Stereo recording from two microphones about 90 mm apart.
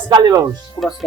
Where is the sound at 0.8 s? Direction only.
20° left (ahead or behind).